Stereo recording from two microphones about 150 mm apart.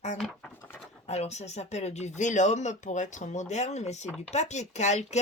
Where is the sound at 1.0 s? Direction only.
45° left (ahead or behind).